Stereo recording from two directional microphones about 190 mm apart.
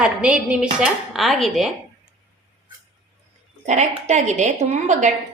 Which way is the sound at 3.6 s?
35° right (ahead or behind).